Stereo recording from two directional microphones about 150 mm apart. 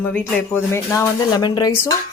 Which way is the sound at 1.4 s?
30° left (ahead or behind).